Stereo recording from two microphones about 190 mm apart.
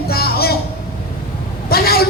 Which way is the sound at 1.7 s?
55° left (ahead or behind).